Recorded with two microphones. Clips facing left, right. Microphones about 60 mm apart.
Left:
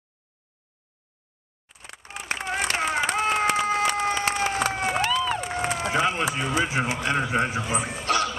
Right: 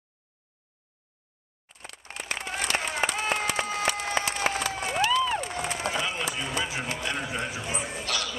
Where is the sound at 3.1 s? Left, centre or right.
Left.